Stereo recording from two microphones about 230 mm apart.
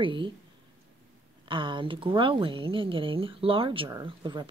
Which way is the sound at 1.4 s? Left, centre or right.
Right.